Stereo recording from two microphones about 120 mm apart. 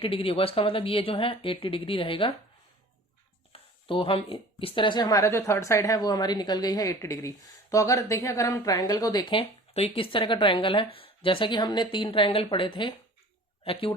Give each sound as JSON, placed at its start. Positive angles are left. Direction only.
{"t": 0.0, "sound": "speech", "side_deg": 50}
{"t": 3.5, "sound": "a woman's voice", "side_deg": 50}
{"t": 9.3, "sound": "speech", "side_deg": 50}